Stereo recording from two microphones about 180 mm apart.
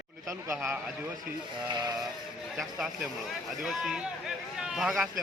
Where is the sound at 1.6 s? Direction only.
25° right (ahead or behind).